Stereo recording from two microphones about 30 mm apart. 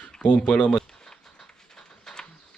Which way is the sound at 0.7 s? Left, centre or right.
Centre.